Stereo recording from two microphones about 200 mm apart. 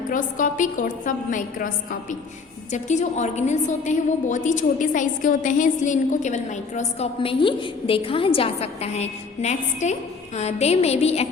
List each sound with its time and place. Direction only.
0.1 s a woman's voice: 40° left (ahead or behind)